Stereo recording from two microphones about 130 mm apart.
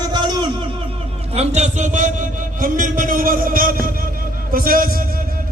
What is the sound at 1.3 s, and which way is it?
A man's voice, 55° right (ahead or behind).